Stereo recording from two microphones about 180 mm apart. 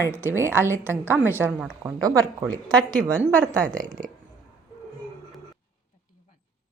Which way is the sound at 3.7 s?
45° right (ahead or behind).